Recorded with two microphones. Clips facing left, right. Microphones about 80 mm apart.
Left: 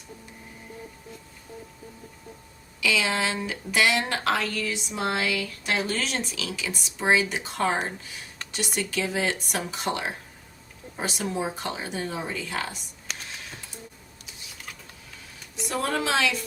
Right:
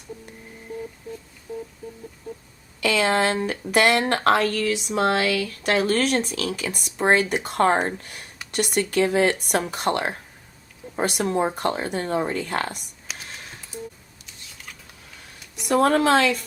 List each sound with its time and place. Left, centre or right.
2.8 s speech: right
13.1 s a sound: centre
14.3 s computer keyboard: centre
15.6 s speech: right